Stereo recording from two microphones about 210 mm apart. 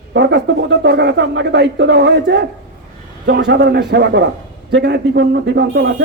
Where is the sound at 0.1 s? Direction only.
55° right (ahead or behind).